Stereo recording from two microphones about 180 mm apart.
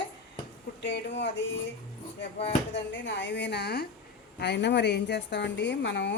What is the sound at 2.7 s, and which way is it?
A woman's voice, 80° left.